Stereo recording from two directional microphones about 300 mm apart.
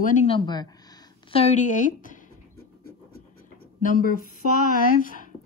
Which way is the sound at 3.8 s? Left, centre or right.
Left.